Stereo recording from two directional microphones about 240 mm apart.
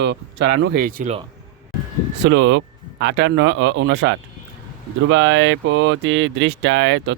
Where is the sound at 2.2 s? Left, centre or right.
Right.